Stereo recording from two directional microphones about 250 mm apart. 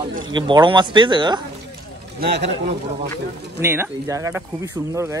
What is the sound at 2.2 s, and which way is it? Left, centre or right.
Speech, right.